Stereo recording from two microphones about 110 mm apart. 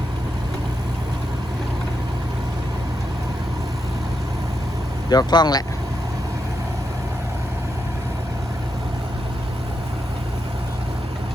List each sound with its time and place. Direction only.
5.0 s speech: 40° left (ahead or behind)